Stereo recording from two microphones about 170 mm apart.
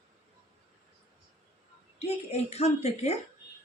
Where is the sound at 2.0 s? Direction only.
40° left (ahead or behind).